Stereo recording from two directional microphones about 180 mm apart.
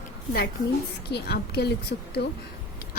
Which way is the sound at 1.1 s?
65° left (ahead or behind).